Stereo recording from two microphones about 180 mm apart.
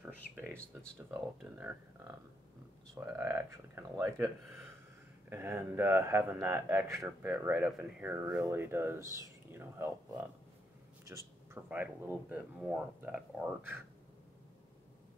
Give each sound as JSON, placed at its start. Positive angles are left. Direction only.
{"t": 1.1, "sound": "speech", "side_deg": -10}
{"t": 5.3, "sound": "speech", "side_deg": -15}
{"t": 11.1, "sound": "speech", "side_deg": -15}